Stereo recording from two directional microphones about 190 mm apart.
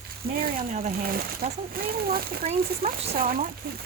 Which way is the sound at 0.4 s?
45° right (ahead or behind).